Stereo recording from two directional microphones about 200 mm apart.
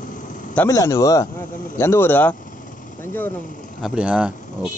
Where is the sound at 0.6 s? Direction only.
15° left (ahead or behind).